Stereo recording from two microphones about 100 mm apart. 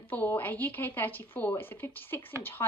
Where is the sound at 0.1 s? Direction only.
20° left (ahead or behind).